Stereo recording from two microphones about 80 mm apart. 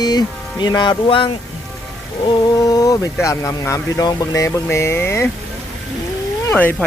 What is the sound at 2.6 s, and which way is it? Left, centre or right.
Speech, left.